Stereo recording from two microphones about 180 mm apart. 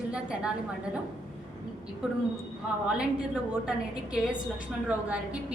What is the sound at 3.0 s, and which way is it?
A woman's voice, 5° right (ahead or behind).